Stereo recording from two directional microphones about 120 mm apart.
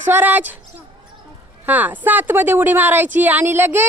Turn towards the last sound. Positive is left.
turn(degrees=-20)  # may be behind; listen again after turning